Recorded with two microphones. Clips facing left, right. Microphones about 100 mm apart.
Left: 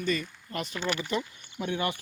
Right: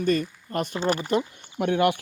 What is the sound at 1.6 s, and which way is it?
Speech, 70° right (ahead or behind).